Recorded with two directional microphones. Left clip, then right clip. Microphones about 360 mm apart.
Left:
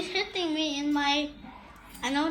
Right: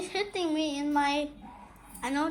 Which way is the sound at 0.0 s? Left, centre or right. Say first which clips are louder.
Left 1 dB; centre.